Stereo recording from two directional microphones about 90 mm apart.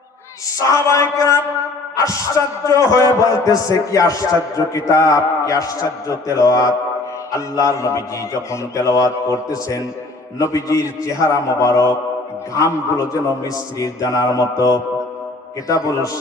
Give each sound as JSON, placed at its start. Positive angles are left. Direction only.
{"t": 0.7, "sound": "speech", "side_deg": 35}